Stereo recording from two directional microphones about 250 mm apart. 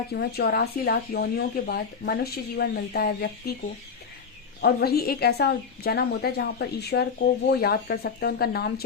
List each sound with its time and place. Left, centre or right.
0.1 s a woman's voice: left
4.6 s a woman's voice: left